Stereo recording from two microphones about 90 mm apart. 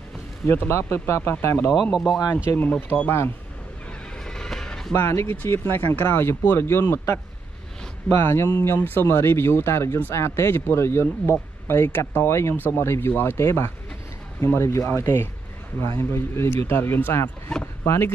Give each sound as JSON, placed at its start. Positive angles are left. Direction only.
{"t": 0.5, "sound": "speech", "side_deg": 30}
{"t": 1.7, "sound": "speech", "side_deg": 0}
{"t": 2.3, "sound": "speech", "side_deg": 15}
{"t": 4.2, "sound": "music", "side_deg": 5}
{"t": 4.9, "sound": "speech", "side_deg": 30}